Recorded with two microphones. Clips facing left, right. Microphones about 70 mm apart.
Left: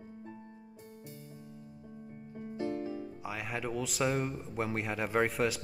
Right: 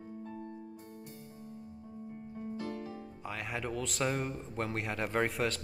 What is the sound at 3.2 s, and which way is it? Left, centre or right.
A man's voice, centre.